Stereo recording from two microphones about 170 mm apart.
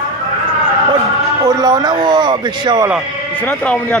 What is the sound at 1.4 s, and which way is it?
A man's voice, 20° right (ahead or behind).